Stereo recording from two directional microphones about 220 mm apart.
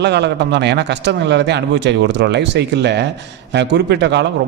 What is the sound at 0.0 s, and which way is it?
A man's voice, 50° right (ahead or behind).